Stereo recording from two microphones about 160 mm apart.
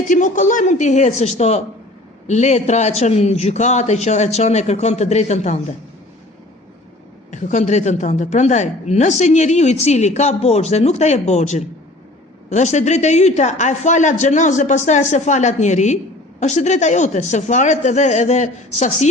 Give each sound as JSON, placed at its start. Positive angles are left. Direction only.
{"t": 0.1, "sound": "a woman's voice", "side_deg": 50}
{"t": 7.3, "sound": "a woman's voice", "side_deg": 50}